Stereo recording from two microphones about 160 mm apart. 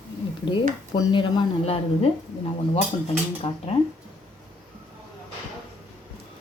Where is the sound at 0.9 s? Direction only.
30° left (ahead or behind).